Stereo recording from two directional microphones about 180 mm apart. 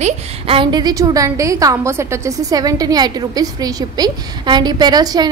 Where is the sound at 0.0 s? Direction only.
30° right (ahead or behind).